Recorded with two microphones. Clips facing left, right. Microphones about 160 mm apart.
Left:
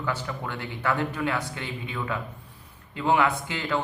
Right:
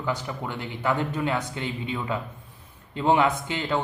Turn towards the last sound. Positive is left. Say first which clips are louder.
# right 2 dB
turn(degrees=-20)  # may be behind; listen again after turning